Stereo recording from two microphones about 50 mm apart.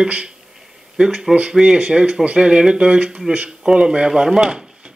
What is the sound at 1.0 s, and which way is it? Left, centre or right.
Speech, centre.